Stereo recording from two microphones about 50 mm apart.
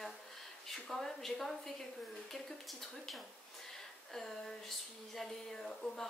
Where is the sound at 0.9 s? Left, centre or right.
Centre.